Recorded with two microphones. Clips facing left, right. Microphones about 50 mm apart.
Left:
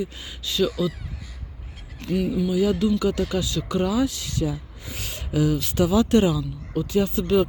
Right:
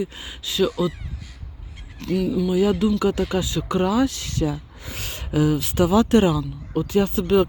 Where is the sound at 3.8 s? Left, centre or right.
Right.